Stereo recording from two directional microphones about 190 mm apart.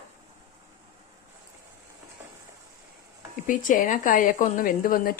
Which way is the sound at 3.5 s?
45° left (ahead or behind).